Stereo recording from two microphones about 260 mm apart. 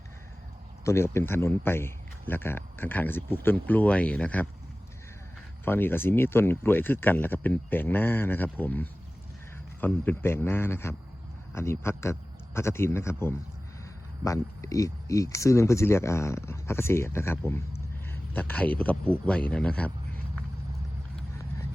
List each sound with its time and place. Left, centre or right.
0.9 s a man's voice: centre
5.6 s a man's voice: centre